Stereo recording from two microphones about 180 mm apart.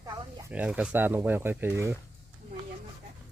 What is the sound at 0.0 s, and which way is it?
Snake, 20° right (ahead or behind).